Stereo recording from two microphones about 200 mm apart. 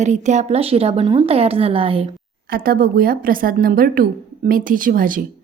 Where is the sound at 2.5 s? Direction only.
45° right (ahead or behind).